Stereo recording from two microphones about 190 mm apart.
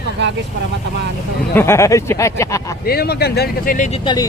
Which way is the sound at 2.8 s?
55° left (ahead or behind).